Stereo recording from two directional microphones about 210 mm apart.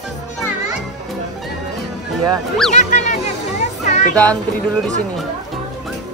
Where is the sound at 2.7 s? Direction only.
35° left (ahead or behind).